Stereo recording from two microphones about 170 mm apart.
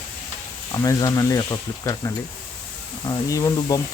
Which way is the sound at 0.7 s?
20° left (ahead or behind).